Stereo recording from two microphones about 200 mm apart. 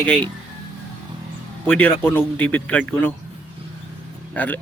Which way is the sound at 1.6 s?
10° left (ahead or behind).